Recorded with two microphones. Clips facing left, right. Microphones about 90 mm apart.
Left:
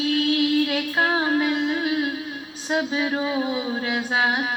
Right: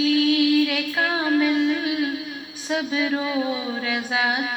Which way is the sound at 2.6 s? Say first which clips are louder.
Even; 30° left (ahead or behind).